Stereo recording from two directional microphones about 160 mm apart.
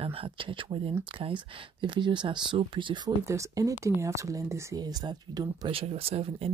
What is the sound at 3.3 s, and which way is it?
Speech, 20° right (ahead or behind).